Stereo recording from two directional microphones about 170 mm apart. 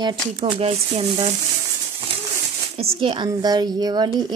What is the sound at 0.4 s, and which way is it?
Speech, 35° right (ahead or behind).